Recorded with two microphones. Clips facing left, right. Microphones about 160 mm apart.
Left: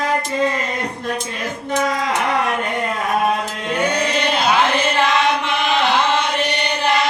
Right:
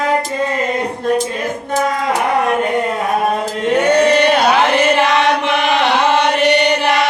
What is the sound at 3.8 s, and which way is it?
Chant, 75° right (ahead or behind).